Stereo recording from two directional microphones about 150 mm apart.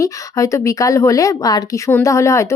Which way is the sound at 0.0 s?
20° left (ahead or behind).